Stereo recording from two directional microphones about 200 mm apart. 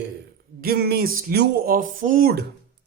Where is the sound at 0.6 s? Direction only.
50° right (ahead or behind).